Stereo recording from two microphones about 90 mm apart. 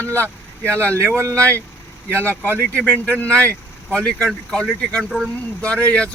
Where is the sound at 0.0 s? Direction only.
20° left (ahead or behind).